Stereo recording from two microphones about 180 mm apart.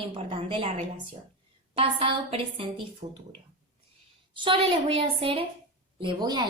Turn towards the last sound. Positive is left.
turn(degrees=-25)  # may be behind; listen again after turning